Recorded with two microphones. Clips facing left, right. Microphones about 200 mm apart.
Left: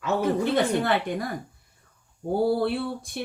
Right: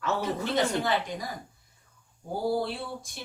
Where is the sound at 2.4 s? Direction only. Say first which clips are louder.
Left 3 dB; 60° left (ahead or behind).